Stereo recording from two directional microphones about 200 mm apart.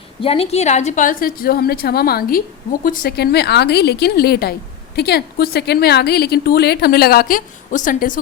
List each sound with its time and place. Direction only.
0.2 s a woman's voice: 30° left (ahead or behind)